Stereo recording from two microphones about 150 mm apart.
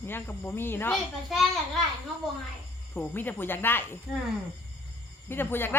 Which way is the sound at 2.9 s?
10° left (ahead or behind).